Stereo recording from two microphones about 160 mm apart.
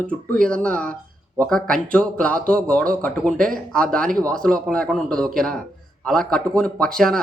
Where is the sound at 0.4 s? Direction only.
5° left (ahead or behind).